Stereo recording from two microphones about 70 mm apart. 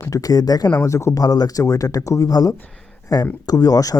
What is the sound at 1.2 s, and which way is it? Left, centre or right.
Speech, left.